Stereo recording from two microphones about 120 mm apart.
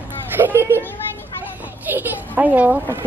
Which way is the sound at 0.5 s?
20° right (ahead or behind).